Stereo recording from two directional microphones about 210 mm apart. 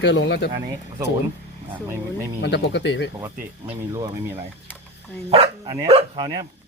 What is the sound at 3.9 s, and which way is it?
Speech, 15° right (ahead or behind).